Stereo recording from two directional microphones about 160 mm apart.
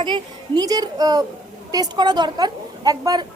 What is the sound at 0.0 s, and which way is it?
A child's voice, 30° right (ahead or behind).